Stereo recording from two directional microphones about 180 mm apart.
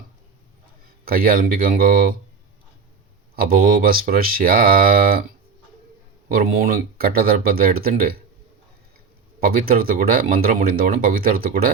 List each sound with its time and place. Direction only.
1.0 s speech: 55° right (ahead or behind)
3.3 s speech: 55° right (ahead or behind)
6.2 s speech: 55° right (ahead or behind)
9.4 s speech: 55° right (ahead or behind)